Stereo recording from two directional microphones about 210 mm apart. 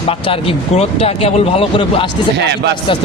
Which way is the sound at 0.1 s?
25° left (ahead or behind).